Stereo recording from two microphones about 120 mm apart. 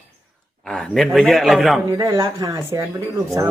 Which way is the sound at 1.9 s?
25° right (ahead or behind).